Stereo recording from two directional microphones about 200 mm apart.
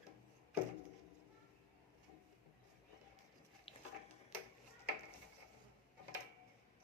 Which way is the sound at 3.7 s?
30° left (ahead or behind).